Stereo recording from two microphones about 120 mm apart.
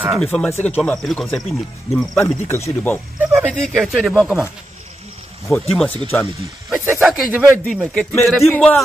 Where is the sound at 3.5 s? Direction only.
Centre (ahead or behind).